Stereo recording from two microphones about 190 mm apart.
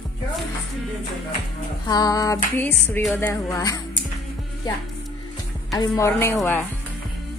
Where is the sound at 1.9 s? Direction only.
20° left (ahead or behind).